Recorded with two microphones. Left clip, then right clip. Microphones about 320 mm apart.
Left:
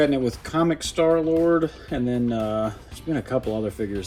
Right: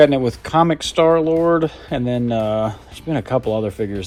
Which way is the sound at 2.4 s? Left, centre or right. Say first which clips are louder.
Right 8 dB; right.